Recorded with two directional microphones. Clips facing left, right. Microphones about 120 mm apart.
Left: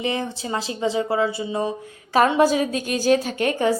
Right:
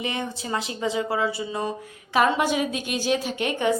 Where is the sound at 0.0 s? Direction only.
30° left (ahead or behind).